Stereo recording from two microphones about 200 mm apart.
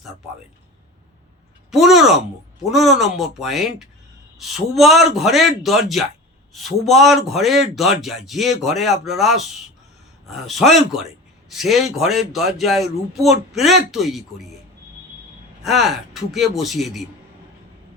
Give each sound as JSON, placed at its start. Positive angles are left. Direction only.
{"t": 1.7, "sound": "speech", "side_deg": 0}
{"t": 15.6, "sound": "speech", "side_deg": 0}